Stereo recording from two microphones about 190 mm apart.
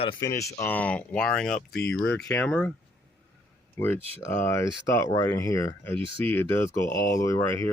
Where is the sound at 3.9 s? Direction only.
30° right (ahead or behind).